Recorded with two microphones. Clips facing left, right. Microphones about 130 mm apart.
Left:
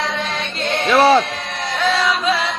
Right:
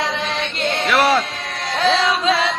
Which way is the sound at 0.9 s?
25° left (ahead or behind).